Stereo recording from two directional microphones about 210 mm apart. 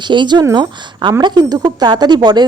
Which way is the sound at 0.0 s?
20° right (ahead or behind).